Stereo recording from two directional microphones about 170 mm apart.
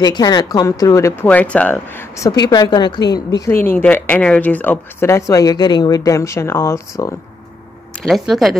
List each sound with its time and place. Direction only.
0.0 s speech: 25° left (ahead or behind)
8.0 s speech: centre (ahead or behind)